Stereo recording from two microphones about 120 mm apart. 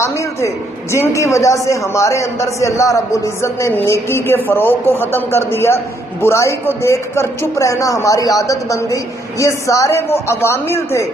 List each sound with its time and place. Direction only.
0.9 s speech: 25° left (ahead or behind)